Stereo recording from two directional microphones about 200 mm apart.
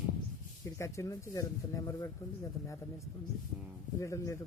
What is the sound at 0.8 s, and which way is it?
Speech, 15° left (ahead or behind).